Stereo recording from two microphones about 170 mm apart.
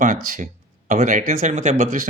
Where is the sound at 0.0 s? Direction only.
50° right (ahead or behind).